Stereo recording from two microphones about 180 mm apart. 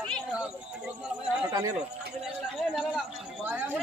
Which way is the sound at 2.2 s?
Centre (ahead or behind).